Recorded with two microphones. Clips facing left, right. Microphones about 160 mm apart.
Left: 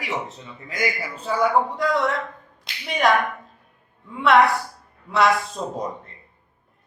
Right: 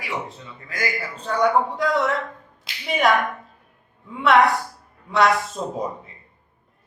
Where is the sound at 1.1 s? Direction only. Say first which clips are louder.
Right 1 dB; 5° left (ahead or behind).